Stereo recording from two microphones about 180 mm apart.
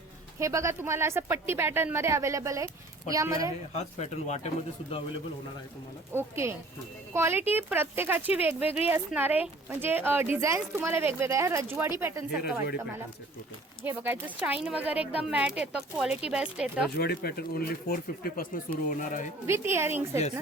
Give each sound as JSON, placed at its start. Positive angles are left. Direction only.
{"t": 0.3, "sound": "a woman's voice", "side_deg": -15}
{"t": 3.8, "sound": "speech", "side_deg": 35}
{"t": 6.1, "sound": "a woman's voice", "side_deg": -15}
{"t": 13.8, "sound": "a woman's voice", "side_deg": -10}
{"t": 17.0, "sound": "speech", "side_deg": 60}
{"t": 19.5, "sound": "a woman's voice", "side_deg": -15}